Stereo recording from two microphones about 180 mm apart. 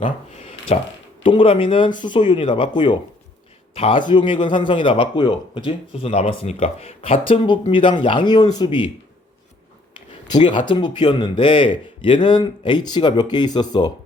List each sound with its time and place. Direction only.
0.7 s a man's voice: 35° left (ahead or behind)
10.1 s a sound: 25° left (ahead or behind)
10.7 s a man's voice: 25° left (ahead or behind)